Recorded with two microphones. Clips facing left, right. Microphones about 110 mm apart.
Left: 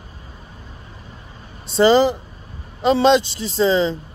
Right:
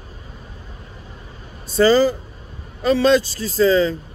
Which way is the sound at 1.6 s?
25° left (ahead or behind).